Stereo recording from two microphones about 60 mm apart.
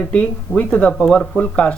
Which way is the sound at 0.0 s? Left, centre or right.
Left.